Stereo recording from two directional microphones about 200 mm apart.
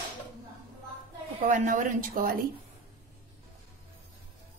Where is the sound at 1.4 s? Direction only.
40° right (ahead or behind).